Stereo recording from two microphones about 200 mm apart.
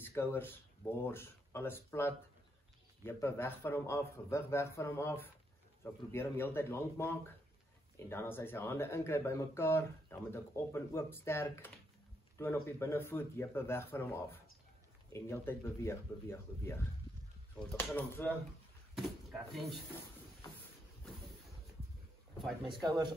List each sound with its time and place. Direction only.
0.0 s speech: 10° left (ahead or behind)
18.9 s speech: centre (ahead or behind)
22.7 s a man's voice: 20° right (ahead or behind)